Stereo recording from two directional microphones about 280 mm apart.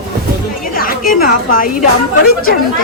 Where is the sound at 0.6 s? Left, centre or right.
Left.